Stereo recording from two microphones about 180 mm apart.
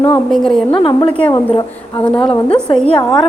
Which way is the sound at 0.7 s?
30° left (ahead or behind).